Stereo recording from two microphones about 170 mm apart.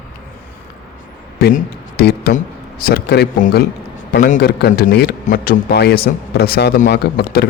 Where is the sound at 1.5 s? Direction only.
65° left (ahead or behind).